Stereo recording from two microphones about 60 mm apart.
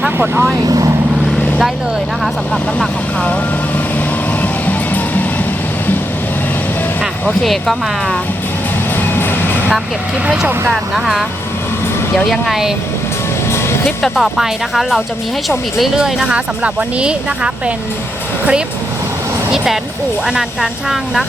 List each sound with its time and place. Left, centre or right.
0.7 s vehicle: right
1.2 s vehicle: centre
7.4 s speech: centre
10.7 s speech: centre
14.0 s speech: centre
19.5 s speech: centre